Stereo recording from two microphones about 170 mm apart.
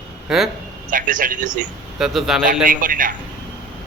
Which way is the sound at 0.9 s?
50° right (ahead or behind).